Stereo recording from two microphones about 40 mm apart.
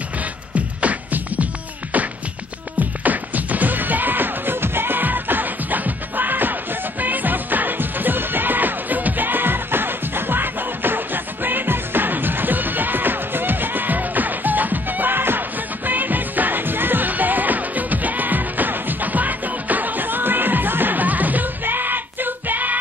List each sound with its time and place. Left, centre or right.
1.1 s music: right